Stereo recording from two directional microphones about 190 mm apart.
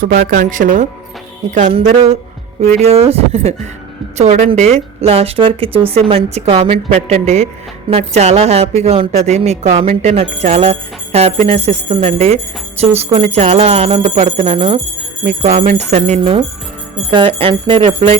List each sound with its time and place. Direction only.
0.0 s speech: 45° right (ahead or behind)
1.5 s jingle bell: 40° right (ahead or behind)